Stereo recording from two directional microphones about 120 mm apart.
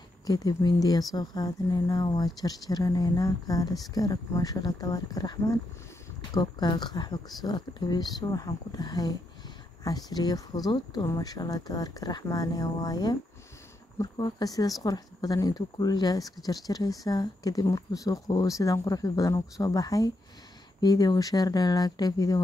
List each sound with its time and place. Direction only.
0.3 s speech: 35° left (ahead or behind)